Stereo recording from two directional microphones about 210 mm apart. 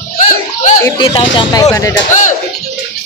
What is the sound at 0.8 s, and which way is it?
Speech, 25° left (ahead or behind).